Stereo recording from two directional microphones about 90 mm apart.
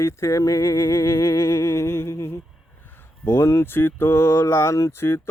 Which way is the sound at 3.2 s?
30° left (ahead or behind).